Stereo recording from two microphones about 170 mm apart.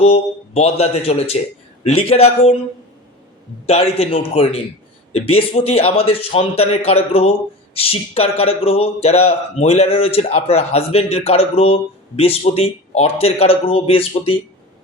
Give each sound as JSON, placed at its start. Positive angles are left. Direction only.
{"t": 0.0, "sound": "a man's voice", "side_deg": 35}
{"t": 3.7, "sound": "a man's voice", "side_deg": 35}